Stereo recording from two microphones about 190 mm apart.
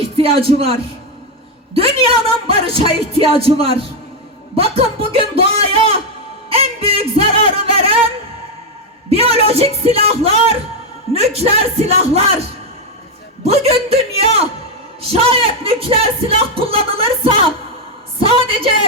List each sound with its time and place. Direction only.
0.0 s speech: 30° right (ahead or behind)
6.5 s a sound: 30° right (ahead or behind)
9.0 s speech: 30° right (ahead or behind)
13.4 s speech: 30° right (ahead or behind)